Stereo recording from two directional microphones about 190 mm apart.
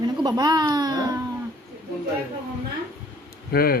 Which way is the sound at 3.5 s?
55° left (ahead or behind).